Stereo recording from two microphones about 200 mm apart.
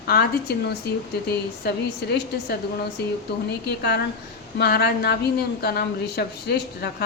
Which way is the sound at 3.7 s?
55° left (ahead or behind).